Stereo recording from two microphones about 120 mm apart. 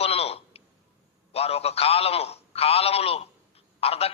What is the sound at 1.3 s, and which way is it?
A man's voice, 55° left (ahead or behind).